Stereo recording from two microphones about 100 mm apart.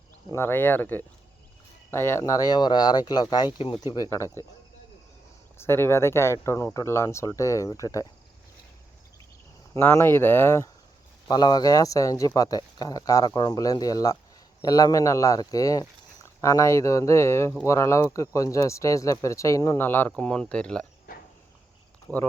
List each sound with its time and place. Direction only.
0.3 s speech: 25° left (ahead or behind)
5.5 s speech: 25° left (ahead or behind)
9.7 s speech: 25° left (ahead or behind)
11.3 s speech: 45° left (ahead or behind)
19.8 s speech: 20° left (ahead or behind)